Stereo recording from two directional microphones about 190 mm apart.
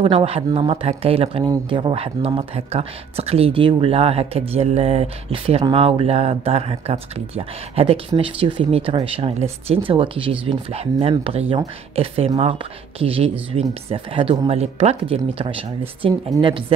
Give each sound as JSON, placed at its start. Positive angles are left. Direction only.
{"t": 0.0, "sound": "speech", "side_deg": -30}